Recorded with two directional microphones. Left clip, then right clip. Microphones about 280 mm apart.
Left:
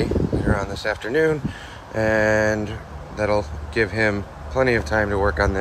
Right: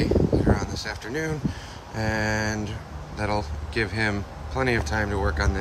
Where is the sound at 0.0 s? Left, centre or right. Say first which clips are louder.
Even; centre.